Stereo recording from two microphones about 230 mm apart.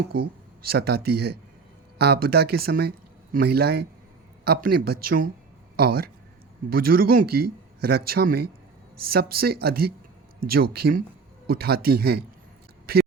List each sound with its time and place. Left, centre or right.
0.1 s speech: right